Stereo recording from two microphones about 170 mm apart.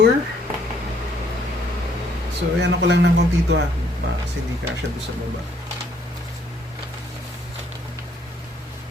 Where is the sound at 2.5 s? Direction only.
90° right.